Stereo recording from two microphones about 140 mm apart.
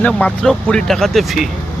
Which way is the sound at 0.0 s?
5° left (ahead or behind).